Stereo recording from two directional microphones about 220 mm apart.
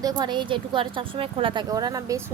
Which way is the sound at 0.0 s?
20° right (ahead or behind).